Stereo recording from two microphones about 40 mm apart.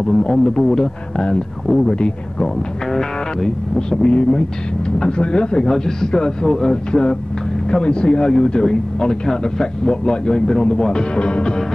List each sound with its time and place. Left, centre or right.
0.0 s speech: centre
2.9 s a man's voice: centre
4.0 s a man's voice: left